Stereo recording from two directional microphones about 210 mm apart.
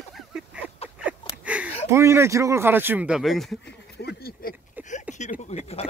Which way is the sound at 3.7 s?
50° left (ahead or behind).